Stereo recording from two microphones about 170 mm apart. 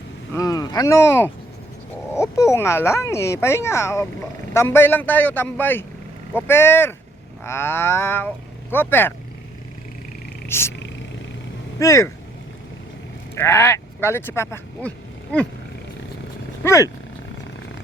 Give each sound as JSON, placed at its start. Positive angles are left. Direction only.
{"t": 0.3, "sound": "speech", "side_deg": 20}
{"t": 10.5, "sound": "speech", "side_deg": 15}
{"t": 11.8, "sound": "speech", "side_deg": 15}
{"t": 13.3, "sound": "speech", "side_deg": 15}
{"t": 16.6, "sound": "speech", "side_deg": 20}